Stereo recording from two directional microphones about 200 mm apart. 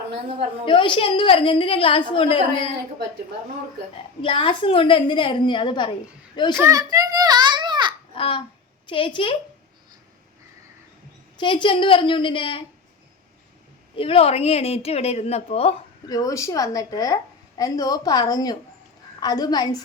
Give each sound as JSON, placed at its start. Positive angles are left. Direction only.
{"t": 0.6, "sound": "a woman's voice", "side_deg": 25}
{"t": 4.2, "sound": "a woman's voice", "side_deg": 25}
{"t": 6.6, "sound": "a child's voice", "side_deg": -15}
{"t": 8.1, "sound": "babbling", "side_deg": 25}
{"t": 8.9, "sound": "a woman's voice", "side_deg": 25}
{"t": 11.3, "sound": "a woman's voice", "side_deg": 25}
{"t": 13.9, "sound": "a woman's voice", "side_deg": 30}
{"t": 16.0, "sound": "a woman's voice", "side_deg": 20}